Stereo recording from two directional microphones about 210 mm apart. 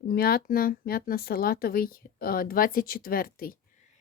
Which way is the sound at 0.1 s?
45° left (ahead or behind).